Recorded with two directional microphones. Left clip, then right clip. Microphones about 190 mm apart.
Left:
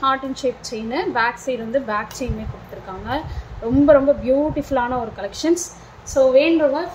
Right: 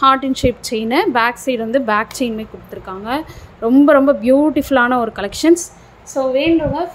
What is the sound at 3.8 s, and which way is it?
Speech, 45° right (ahead or behind).